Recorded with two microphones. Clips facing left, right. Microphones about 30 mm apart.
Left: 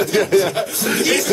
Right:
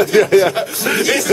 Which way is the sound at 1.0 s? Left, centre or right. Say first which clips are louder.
Left 1 dB; centre.